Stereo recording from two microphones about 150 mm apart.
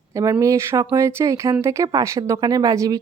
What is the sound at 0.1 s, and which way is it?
A woman's voice, 20° right (ahead or behind).